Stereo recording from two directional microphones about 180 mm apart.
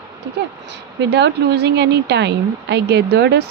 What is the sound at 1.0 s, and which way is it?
Speech, 75° right (ahead or behind).